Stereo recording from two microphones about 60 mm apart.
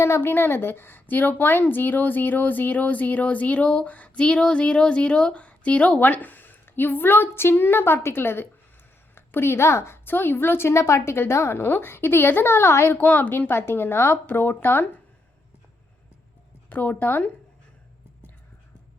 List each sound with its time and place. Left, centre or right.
0.0 s a woman's voice: left
11.6 s a woman's voice: left
13.0 s a woman's voice: left
16.6 s a woman's voice: left